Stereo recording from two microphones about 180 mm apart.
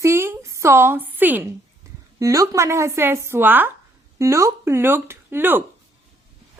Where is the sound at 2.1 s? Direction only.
20° right (ahead or behind).